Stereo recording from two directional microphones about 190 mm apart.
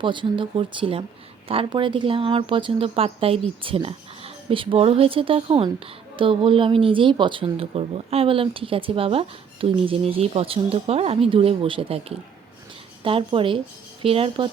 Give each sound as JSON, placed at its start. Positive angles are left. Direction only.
{"t": 0.0, "sound": "speech", "side_deg": -25}